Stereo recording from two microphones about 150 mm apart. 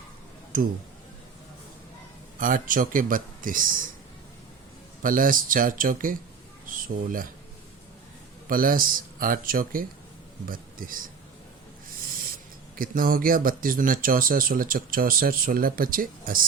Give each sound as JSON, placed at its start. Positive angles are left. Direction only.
{"t": 0.5, "sound": "speech", "side_deg": -65}
{"t": 2.4, "sound": "speech", "side_deg": -65}
{"t": 5.0, "sound": "speech", "side_deg": -65}
{"t": 8.4, "sound": "speech", "side_deg": -70}
{"t": 12.7, "sound": "speech", "side_deg": -70}